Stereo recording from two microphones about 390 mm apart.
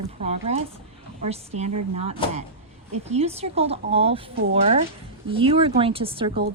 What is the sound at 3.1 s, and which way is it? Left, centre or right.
A woman's voice, centre.